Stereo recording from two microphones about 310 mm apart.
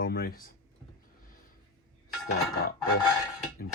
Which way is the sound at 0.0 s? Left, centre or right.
Left.